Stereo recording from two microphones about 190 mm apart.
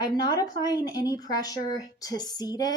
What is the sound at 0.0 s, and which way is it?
Speech, 20° left (ahead or behind).